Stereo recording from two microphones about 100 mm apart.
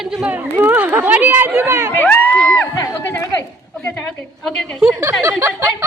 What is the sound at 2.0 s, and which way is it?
Speech, 20° left (ahead or behind).